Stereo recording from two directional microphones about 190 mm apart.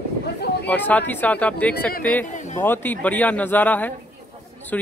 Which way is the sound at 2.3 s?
40° left (ahead or behind).